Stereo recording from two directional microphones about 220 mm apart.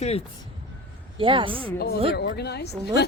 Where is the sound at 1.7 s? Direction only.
45° left (ahead or behind).